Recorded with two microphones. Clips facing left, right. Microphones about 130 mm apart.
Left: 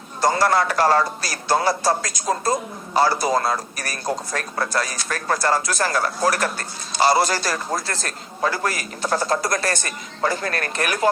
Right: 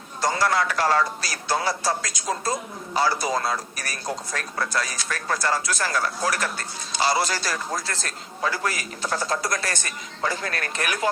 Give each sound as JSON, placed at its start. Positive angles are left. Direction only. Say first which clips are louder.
{"t": 0.2, "sound": "a man's voice", "louder": "left 4 dB", "side_deg": 40}